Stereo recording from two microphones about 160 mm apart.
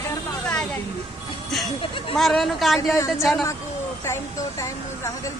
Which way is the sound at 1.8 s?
35° left (ahead or behind).